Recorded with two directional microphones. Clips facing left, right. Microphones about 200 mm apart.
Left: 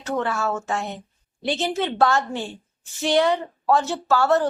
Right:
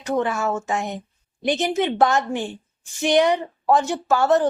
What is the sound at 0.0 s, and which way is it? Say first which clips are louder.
A woman's voice: right 2 dB; 15° right (ahead or behind).